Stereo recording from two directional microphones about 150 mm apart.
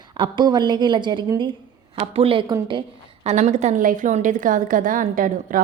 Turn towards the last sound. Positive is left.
turn(degrees=-65)  # may be behind; listen again after turning